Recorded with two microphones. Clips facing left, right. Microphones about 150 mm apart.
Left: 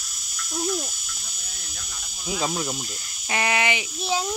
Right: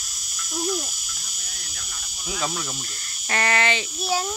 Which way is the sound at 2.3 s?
25° left (ahead or behind).